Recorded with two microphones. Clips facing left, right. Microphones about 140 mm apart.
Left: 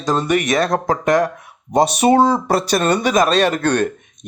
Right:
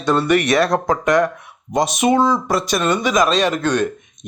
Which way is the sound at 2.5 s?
35° left (ahead or behind).